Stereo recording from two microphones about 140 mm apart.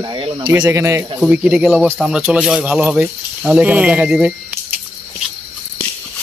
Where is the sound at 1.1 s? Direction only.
10° right (ahead or behind).